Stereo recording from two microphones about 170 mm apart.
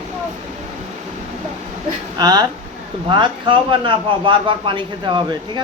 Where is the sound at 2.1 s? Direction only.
25° right (ahead or behind).